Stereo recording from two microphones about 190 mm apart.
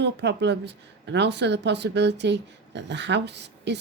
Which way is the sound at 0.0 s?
65° right (ahead or behind).